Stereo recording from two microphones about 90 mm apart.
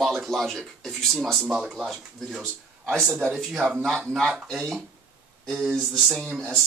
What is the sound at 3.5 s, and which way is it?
Speech, centre (ahead or behind).